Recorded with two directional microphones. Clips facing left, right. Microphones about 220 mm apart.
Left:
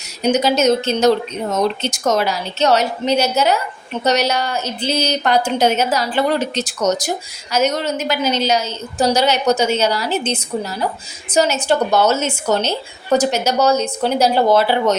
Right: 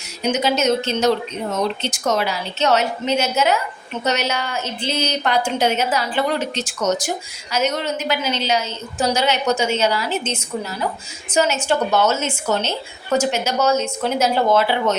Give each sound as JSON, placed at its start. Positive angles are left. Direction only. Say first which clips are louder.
{"t": 0.3, "sound": "a woman's voice", "louder": "left 3 dB", "side_deg": 40}